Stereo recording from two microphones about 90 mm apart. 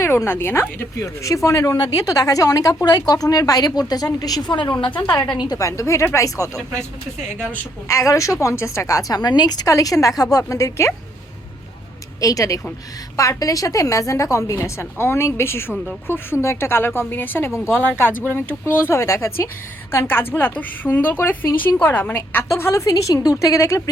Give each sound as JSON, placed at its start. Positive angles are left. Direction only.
{"t": 0.0, "sound": "a woman's voice", "side_deg": 25}
{"t": 4.9, "sound": "speech", "side_deg": 45}
{"t": 5.5, "sound": "a woman's voice", "side_deg": 35}
{"t": 6.6, "sound": "speech", "side_deg": 10}
{"t": 7.5, "sound": "a woman's voice", "side_deg": 30}
{"t": 12.2, "sound": "a woman's voice", "side_deg": 40}